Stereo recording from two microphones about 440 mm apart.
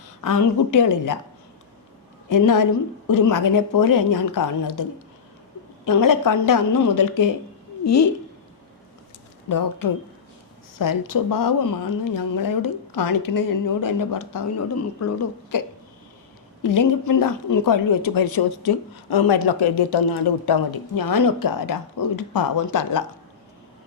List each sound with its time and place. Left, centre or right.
0.2 s speech: left
2.3 s speech: left
9.5 s speech: left
16.6 s speech: left